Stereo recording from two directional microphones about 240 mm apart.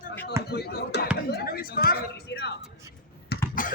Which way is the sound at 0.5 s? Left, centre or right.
Left.